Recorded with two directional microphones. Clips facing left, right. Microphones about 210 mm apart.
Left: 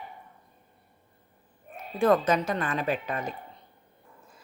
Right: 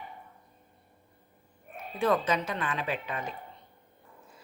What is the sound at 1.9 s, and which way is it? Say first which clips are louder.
A woman's voice: left 4 dB; 45° left (ahead or behind).